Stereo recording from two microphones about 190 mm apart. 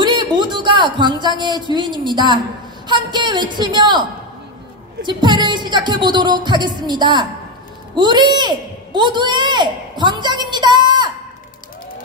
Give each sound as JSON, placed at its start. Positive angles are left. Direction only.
{"t": 0.0, "sound": "a sound", "side_deg": -25}
{"t": 1.7, "sound": "speech", "side_deg": -25}
{"t": 5.0, "sound": "a woman's voice", "side_deg": -25}